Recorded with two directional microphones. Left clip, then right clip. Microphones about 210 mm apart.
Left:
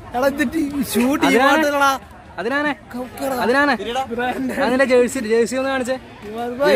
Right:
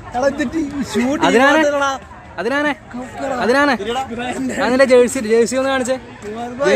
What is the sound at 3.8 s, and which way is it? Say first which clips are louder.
Speech: even; 25° left (ahead or behind).